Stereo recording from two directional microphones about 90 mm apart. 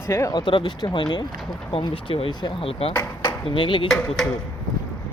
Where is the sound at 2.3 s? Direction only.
55° left (ahead or behind).